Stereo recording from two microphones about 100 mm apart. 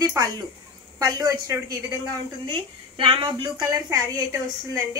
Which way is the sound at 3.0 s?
60° right (ahead or behind).